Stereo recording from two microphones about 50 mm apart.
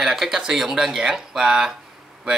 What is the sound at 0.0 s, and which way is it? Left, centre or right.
A man's voice, centre.